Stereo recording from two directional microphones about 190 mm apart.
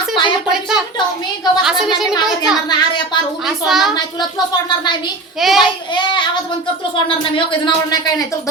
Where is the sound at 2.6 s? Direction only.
20° left (ahead or behind).